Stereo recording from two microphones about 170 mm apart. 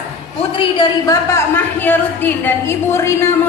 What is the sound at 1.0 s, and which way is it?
A woman's voice, 20° left (ahead or behind).